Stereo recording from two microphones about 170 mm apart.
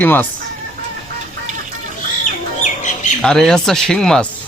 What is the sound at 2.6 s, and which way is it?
Bird, 45° left (ahead or behind).